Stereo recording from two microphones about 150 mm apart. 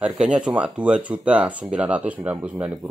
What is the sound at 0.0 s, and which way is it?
Speech, 5° right (ahead or behind).